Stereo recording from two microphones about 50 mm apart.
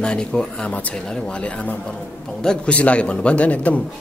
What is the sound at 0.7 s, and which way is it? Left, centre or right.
A man's voice, left.